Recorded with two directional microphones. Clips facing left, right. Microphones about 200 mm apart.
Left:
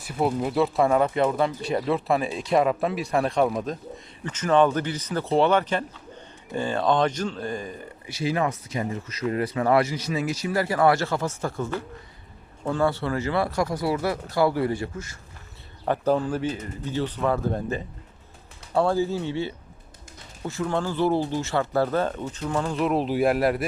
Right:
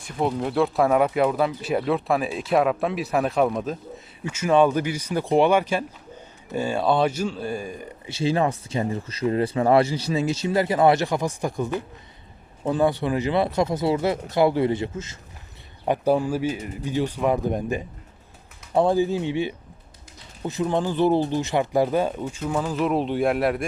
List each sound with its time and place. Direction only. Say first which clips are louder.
0.0 s speech: even; 5° left (ahead or behind); by 7.9 s 10° right (ahead or behind)
8.0 s speech: right 3 dB; 25° right (ahead or behind); by 23.6 s centre (ahead or behind)